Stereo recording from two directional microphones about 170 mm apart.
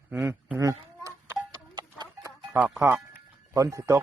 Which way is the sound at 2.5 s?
10° right (ahead or behind).